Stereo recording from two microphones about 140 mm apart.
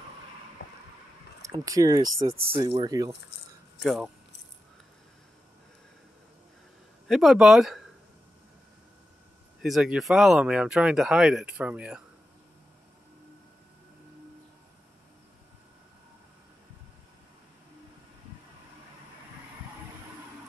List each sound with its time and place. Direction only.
1.4 s speech: 25° right (ahead or behind)
3.8 s speech: centre (ahead or behind)
7.1 s speech: centre (ahead or behind)
9.6 s speech: 5° right (ahead or behind)